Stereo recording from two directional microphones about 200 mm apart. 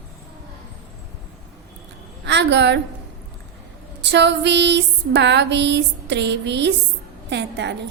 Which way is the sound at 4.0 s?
60° right (ahead or behind).